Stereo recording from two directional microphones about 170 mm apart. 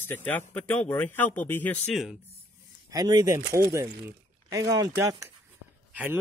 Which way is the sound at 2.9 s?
20° right (ahead or behind).